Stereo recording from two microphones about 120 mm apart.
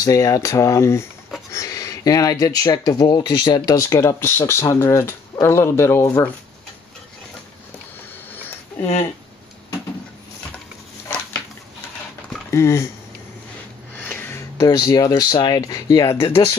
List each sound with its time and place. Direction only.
0.0 s speech: 30° left (ahead or behind)
12.4 s speech: 20° left (ahead or behind)
13.9 s a sound: 15° left (ahead or behind)
14.6 s speech: 35° left (ahead or behind)
16.3 s speech: 25° left (ahead or behind)